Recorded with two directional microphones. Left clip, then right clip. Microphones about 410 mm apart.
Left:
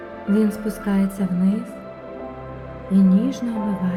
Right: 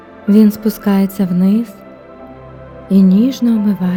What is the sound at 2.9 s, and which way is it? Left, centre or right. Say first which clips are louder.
Speech: right 7 dB; right.